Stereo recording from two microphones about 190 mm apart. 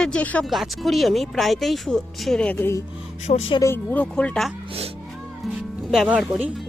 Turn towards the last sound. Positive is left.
turn(degrees=-5)  # may be behind; listen again after turning